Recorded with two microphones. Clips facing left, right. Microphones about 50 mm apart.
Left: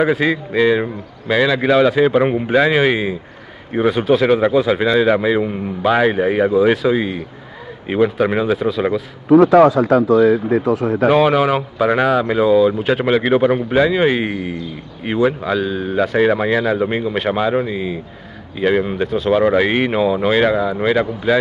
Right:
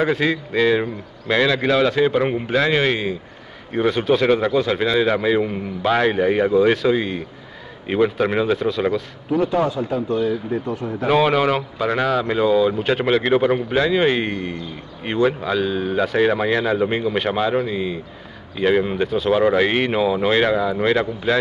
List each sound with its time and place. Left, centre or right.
0.0 s a man's voice: centre
9.3 s speech: left
11.1 s speech: centre